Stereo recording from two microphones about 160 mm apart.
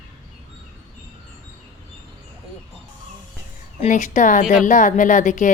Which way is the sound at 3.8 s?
50° left (ahead or behind).